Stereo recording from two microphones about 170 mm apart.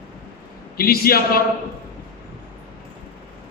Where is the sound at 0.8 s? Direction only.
60° left (ahead or behind).